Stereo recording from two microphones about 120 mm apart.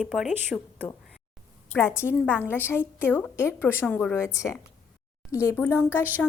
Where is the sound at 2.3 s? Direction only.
20° left (ahead or behind).